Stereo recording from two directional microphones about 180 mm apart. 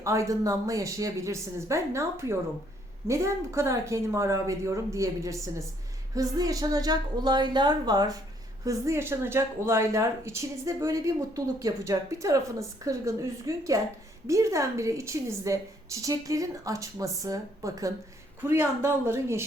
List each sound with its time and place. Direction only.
0.0 s a woman's voice: 15° right (ahead or behind)